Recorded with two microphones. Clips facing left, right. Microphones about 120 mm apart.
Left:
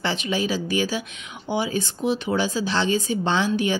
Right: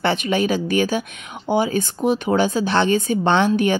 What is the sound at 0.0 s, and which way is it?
A woman's voice, 55° right (ahead or behind).